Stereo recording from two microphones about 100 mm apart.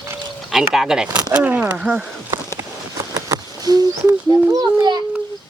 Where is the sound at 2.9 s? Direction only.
35° right (ahead or behind).